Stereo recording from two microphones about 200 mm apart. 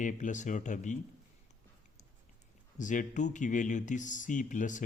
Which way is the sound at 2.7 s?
40° left (ahead or behind).